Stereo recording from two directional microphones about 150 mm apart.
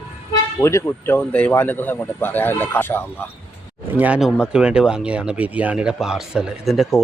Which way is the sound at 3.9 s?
10° right (ahead or behind).